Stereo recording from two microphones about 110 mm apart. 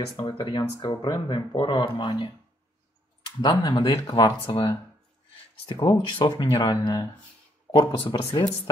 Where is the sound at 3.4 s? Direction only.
40° left (ahead or behind).